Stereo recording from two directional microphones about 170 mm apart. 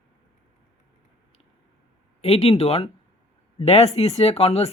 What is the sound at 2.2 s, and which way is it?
Speech, 35° left (ahead or behind).